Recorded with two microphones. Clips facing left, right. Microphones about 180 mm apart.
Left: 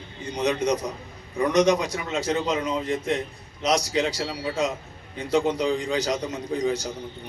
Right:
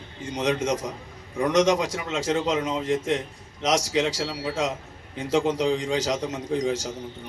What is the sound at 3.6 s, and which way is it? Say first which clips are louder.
Speech: even; 90° right.